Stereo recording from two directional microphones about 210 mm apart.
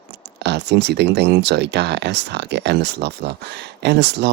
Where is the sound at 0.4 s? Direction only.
55° right (ahead or behind).